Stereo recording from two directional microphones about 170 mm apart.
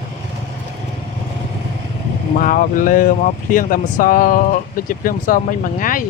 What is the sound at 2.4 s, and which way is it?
Speech, 55° left (ahead or behind).